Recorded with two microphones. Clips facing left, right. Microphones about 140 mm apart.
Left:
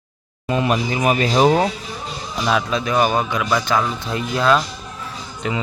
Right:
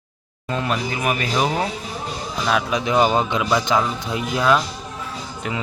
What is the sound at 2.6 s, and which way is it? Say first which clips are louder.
Speech: even; 15° right (ahead or behind).